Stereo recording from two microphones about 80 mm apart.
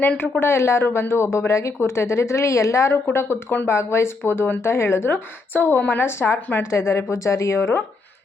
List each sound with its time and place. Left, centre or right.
0.2 s a woman's voice: left